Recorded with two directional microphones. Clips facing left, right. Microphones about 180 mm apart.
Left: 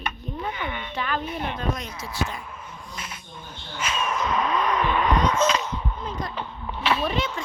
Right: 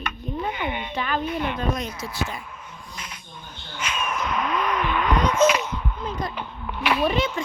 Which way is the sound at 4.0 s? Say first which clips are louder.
Left 2 dB; 25° left (ahead or behind).